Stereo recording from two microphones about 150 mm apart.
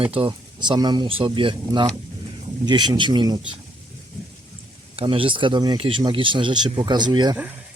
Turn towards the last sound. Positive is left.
turn(degrees=-10)  # may be behind; listen again after turning